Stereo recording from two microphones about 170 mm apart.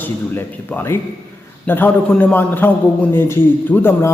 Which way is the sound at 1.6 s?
10° left (ahead or behind).